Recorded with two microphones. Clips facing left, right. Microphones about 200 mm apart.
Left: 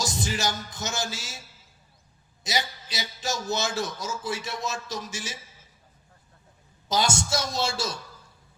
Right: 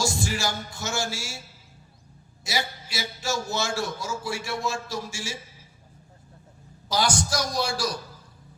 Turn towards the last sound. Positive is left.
turn(degrees=25)  # may be behind; listen again after turning